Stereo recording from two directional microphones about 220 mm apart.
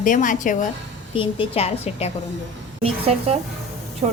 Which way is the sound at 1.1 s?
25° left (ahead or behind).